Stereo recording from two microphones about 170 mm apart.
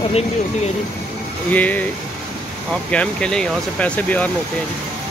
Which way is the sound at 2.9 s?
5° left (ahead or behind).